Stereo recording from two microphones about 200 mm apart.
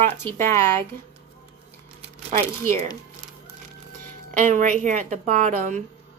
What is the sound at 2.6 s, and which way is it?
Speech, 15° left (ahead or behind).